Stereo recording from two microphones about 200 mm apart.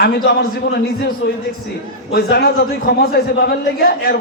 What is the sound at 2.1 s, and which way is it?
A man's voice, 50° left (ahead or behind).